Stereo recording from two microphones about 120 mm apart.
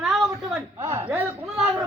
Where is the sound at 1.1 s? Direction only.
15° right (ahead or behind).